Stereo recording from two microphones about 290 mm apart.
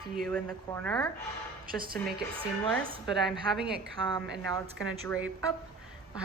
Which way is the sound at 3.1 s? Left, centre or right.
Centre.